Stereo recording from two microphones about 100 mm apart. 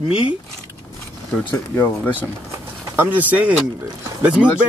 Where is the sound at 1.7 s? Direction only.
20° left (ahead or behind).